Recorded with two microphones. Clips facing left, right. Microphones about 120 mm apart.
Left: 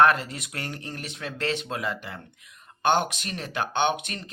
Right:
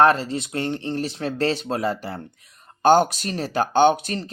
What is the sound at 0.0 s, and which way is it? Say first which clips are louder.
Speech: right 3 dB; 30° right (ahead or behind).